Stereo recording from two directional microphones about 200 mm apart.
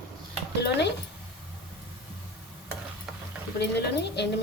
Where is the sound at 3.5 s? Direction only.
55° left (ahead or behind).